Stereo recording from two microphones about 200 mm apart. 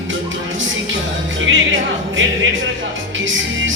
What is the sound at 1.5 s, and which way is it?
Music, 75° right (ahead or behind).